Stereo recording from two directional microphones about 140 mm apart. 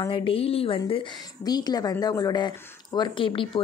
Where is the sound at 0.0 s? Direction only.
35° left (ahead or behind).